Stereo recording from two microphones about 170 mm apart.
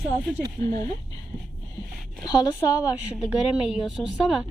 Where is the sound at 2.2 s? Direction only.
25° left (ahead or behind).